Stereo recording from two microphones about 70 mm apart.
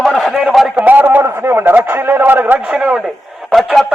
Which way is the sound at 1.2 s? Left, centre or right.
Right.